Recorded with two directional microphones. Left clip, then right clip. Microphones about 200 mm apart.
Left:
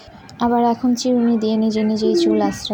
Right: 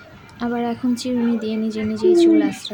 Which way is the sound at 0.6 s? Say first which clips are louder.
Left 6 dB; 10° left (ahead or behind).